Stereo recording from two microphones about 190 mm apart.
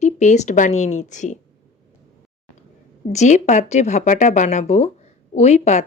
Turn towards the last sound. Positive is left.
turn(degrees=35)  # may be behind; listen again after turning